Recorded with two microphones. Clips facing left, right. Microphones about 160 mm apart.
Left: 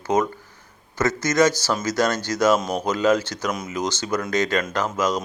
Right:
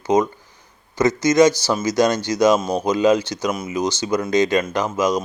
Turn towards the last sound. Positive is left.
turn(degrees=-15)  # may be behind; listen again after turning